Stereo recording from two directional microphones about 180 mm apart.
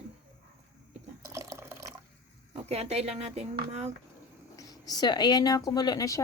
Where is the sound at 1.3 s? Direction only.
15° right (ahead or behind).